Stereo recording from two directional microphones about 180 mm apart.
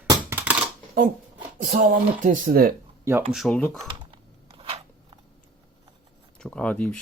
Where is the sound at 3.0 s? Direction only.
10° right (ahead or behind).